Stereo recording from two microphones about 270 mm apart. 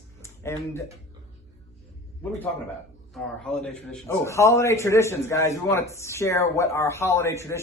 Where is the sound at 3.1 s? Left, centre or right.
Centre.